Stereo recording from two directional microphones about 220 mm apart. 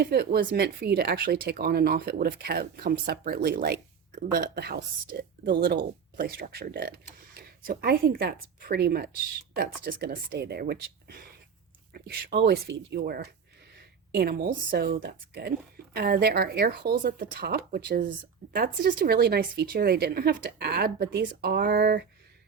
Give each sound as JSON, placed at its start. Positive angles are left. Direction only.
{"t": 0.0, "sound": "a woman's voice", "side_deg": -45}